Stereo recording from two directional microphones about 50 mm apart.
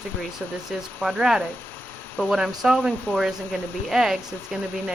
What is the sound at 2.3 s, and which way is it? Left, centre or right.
Speech, centre.